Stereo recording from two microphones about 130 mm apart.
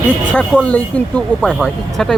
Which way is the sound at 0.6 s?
10° left (ahead or behind).